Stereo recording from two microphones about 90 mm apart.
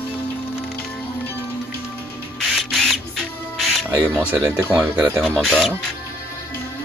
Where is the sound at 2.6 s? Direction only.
Centre (ahead or behind).